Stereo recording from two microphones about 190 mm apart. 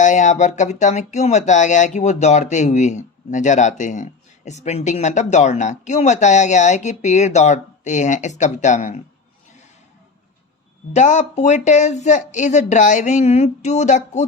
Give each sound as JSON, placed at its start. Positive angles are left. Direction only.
{"t": 0.0, "sound": "speech", "side_deg": 40}
{"t": 10.9, "sound": "speech", "side_deg": 40}